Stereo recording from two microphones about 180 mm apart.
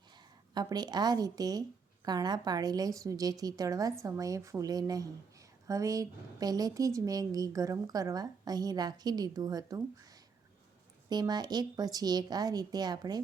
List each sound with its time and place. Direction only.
0.5 s a woman's voice: 25° right (ahead or behind)
11.1 s a woman's voice: 25° right (ahead or behind)